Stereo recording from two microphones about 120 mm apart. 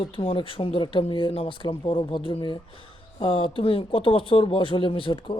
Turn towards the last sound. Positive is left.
turn(degrees=45)  # may be behind; listen again after turning